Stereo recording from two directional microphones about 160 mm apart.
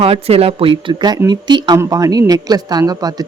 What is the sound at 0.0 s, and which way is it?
Speech, 40° right (ahead or behind).